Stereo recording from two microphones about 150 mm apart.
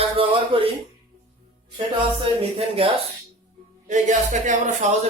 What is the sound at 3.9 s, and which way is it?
Speech, 55° right (ahead or behind).